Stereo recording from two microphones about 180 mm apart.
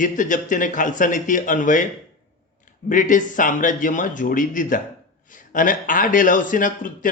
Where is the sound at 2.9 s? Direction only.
45° left (ahead or behind).